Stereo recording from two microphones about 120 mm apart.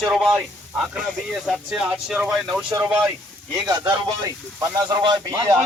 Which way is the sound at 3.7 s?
30° right (ahead or behind).